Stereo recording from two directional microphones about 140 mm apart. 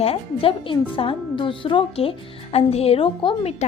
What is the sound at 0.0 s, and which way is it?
A woman's voice, 45° left (ahead or behind).